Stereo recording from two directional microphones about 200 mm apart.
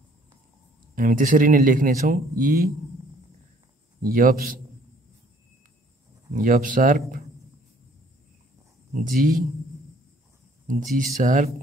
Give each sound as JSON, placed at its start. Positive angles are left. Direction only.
{"t": 0.9, "sound": "speech", "side_deg": -40}
{"t": 4.0, "sound": "speech", "side_deg": -40}
{"t": 6.3, "sound": "speech", "side_deg": -45}
{"t": 8.9, "sound": "speech", "side_deg": -40}
{"t": 11.1, "sound": "speech", "side_deg": -40}